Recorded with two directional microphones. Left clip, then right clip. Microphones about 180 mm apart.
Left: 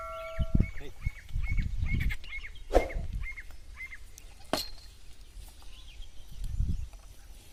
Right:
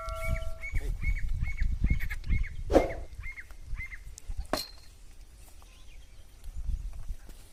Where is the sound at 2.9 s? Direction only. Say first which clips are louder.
Right 2 dB; 45° left (ahead or behind).